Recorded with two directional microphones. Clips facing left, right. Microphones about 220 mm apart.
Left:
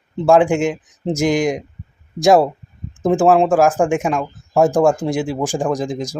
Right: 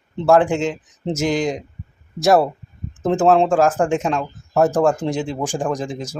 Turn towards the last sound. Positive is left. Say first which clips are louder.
# left 3 dB
turn(degrees=10)  # may be behind; listen again after turning